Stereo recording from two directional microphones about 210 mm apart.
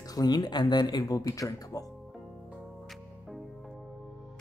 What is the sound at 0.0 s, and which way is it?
Speech, 20° left (ahead or behind).